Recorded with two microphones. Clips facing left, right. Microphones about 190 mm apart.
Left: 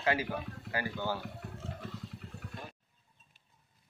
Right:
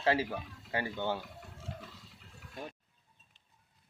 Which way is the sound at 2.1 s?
55° left (ahead or behind).